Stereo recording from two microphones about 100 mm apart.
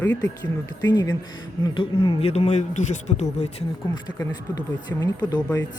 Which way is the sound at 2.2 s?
90° left.